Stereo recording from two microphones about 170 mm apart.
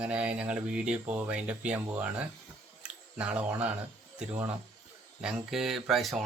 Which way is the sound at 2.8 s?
5° right (ahead or behind).